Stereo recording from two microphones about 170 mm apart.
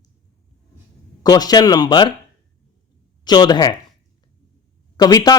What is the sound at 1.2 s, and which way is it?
Speech, 25° left (ahead or behind).